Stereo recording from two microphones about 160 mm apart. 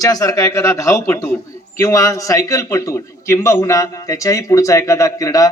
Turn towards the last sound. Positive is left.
turn(degrees=20)  # may be behind; listen again after turning